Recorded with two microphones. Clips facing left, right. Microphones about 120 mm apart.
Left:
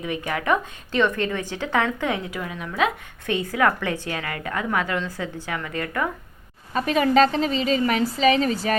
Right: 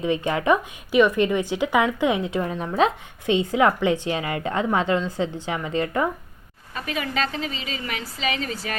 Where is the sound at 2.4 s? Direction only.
35° right (ahead or behind).